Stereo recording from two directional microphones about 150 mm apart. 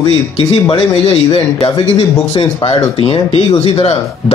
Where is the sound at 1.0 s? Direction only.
40° left (ahead or behind).